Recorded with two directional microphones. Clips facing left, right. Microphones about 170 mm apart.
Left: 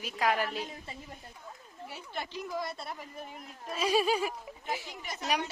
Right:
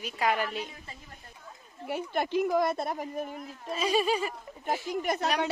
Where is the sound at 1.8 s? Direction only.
55° right (ahead or behind).